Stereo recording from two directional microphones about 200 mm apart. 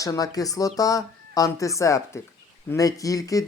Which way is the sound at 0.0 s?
15° left (ahead or behind).